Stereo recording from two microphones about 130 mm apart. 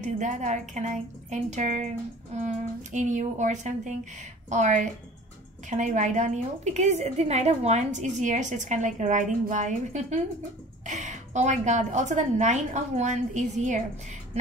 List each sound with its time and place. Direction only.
0.0 s a woman's voice: 65° right (ahead or behind)